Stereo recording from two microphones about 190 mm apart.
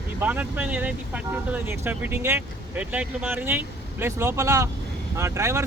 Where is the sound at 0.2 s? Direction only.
10° right (ahead or behind).